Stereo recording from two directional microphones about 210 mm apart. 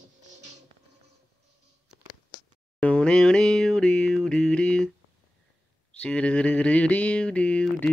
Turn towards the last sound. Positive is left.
turn(degrees=5)  # may be behind; listen again after turning